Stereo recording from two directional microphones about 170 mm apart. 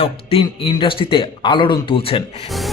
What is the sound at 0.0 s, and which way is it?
A man's voice, 30° left (ahead or behind).